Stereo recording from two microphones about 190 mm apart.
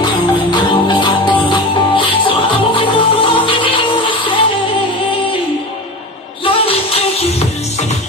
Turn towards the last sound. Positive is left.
turn(degrees=30)  # may be behind; listen again after turning